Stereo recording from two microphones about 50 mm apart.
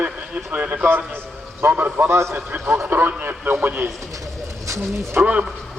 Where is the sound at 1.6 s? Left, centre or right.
Right.